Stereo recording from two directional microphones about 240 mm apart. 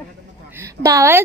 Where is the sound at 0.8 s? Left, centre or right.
Centre.